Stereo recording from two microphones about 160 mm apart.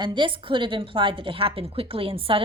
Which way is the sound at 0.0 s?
30° right (ahead or behind).